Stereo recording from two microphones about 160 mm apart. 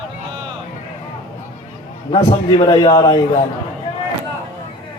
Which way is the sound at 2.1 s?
30° left (ahead or behind).